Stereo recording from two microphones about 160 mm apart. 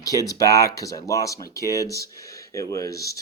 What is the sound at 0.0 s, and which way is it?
Speech, 20° left (ahead or behind).